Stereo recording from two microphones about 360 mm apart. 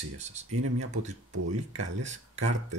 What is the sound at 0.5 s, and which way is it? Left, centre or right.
Speech, right.